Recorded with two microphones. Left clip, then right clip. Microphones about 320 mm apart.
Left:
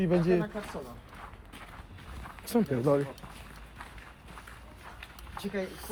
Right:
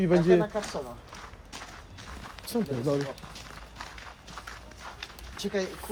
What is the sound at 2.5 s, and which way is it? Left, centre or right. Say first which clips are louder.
Speech: left 2 dB; left.